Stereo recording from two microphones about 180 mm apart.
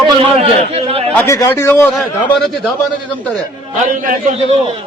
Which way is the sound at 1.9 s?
Centre (ahead or behind).